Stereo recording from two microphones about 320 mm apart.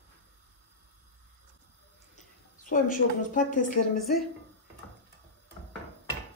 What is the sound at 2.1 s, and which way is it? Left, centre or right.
A woman's voice, left.